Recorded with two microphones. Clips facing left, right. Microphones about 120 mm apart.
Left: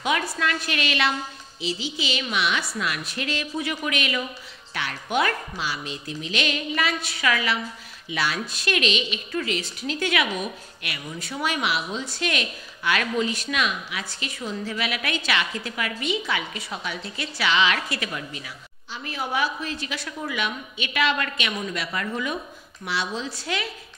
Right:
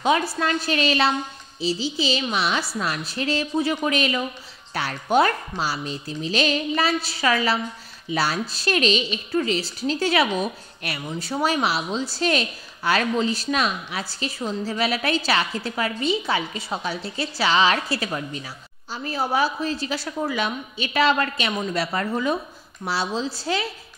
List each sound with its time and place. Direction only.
0.0 s a woman's voice: 30° right (ahead or behind)